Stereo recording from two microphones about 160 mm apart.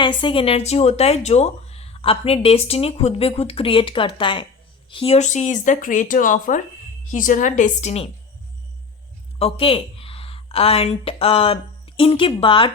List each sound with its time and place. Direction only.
0.0 s speech: 30° left (ahead or behind); by 8.0 s 45° left (ahead or behind)
9.4 s speech: 35° left (ahead or behind)